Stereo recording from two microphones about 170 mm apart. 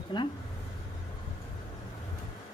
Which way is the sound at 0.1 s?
30° left (ahead or behind).